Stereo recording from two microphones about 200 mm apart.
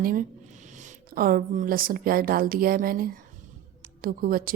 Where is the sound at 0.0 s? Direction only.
45° right (ahead or behind).